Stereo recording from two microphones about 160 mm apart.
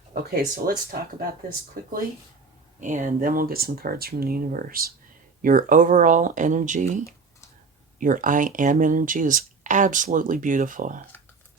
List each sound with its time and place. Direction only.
0.1 s speech: 70° right (ahead or behind)
2.8 s speech: 55° right (ahead or behind)